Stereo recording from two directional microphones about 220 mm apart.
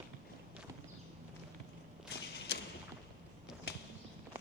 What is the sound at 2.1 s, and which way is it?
Whip, 50° left (ahead or behind).